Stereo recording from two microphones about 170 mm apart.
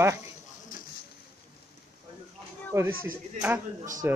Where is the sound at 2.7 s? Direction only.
20° right (ahead or behind).